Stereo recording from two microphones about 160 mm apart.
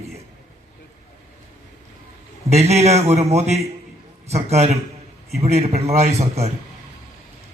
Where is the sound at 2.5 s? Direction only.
40° right (ahead or behind).